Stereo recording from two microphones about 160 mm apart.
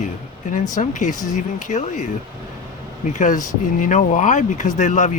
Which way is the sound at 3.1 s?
50° left (ahead or behind).